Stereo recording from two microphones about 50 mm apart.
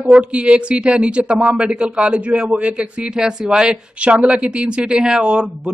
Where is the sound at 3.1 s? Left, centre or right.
Centre.